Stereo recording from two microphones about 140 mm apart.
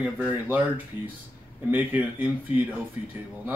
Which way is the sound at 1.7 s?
10° right (ahead or behind).